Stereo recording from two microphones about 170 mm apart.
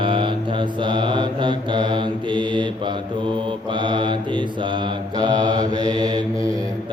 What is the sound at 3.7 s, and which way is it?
Mantra, 30° right (ahead or behind).